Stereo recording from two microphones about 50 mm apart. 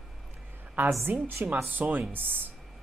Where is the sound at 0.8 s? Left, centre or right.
Right.